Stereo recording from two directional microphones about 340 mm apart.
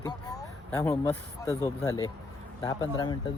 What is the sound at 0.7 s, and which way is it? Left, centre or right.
Speech, centre.